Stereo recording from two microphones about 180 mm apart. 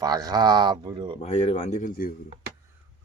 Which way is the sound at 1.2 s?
30° left (ahead or behind).